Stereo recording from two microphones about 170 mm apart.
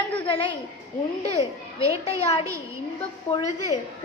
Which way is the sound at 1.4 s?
20° right (ahead or behind).